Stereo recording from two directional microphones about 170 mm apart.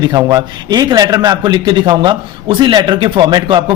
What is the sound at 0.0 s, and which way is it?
A man's voice, 25° right (ahead or behind).